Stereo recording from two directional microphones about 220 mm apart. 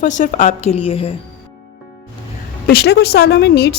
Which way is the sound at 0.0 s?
35° left (ahead or behind).